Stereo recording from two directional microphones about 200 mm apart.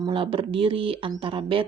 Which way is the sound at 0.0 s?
25° right (ahead or behind).